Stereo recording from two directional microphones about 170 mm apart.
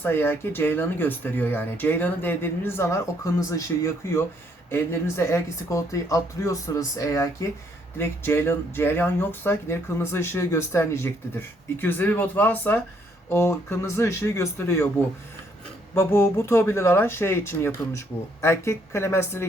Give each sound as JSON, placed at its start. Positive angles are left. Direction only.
{"t": 0.0, "sound": "speech", "side_deg": 10}